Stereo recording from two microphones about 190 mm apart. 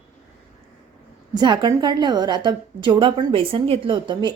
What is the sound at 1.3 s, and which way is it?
A woman's voice, 25° right (ahead or behind).